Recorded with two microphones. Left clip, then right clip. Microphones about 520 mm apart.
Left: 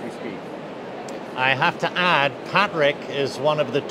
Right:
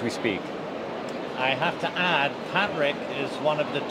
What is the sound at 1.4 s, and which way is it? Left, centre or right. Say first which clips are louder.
Speech: left 6 dB; left.